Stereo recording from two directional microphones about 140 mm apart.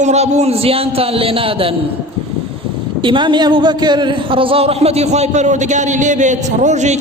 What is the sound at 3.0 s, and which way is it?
A man's voice, 35° right (ahead or behind).